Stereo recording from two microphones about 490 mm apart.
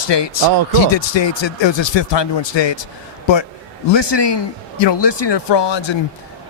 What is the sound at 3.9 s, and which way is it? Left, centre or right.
A man's voice, left.